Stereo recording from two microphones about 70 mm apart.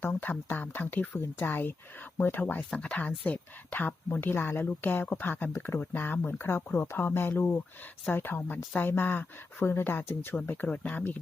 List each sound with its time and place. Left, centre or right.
0.0 s speech: left